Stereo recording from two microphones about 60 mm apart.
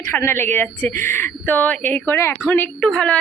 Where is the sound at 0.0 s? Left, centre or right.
Left.